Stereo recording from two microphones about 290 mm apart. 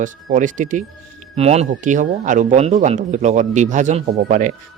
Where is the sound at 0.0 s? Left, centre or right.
Right.